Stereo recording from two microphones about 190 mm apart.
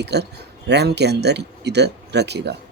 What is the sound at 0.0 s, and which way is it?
Speech, 60° right (ahead or behind).